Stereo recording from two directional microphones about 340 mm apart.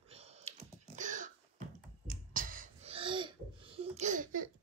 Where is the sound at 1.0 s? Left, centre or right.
Right.